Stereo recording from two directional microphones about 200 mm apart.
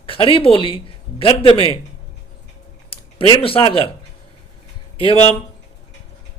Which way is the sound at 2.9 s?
25° left (ahead or behind).